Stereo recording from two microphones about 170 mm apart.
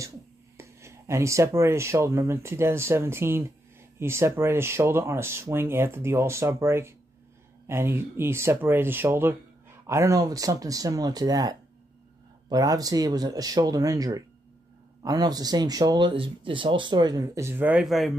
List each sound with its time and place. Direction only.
0.6 s speech: 15° right (ahead or behind); by 18.1 s centre (ahead or behind)